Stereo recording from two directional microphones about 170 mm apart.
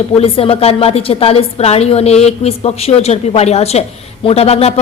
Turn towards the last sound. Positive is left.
turn(degrees=35)  # may be behind; listen again after turning